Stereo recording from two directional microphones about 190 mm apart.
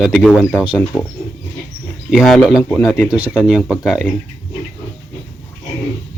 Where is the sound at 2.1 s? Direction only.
Centre (ahead or behind).